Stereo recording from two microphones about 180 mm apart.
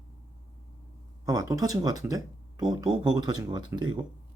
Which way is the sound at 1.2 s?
20° right (ahead or behind).